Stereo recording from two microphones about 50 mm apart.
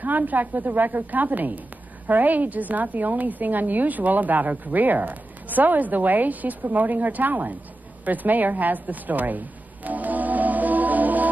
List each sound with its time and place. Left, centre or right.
0.0 s a woman's voice: right
9.8 s organ: right